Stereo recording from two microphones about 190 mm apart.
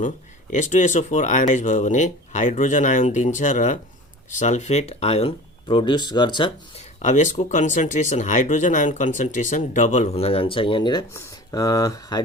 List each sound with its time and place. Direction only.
0.5 s speech: 40° left (ahead or behind); by 6.8 s 25° left (ahead or behind)
7.0 s speech: 40° left (ahead or behind); by 12.2 s 20° left (ahead or behind)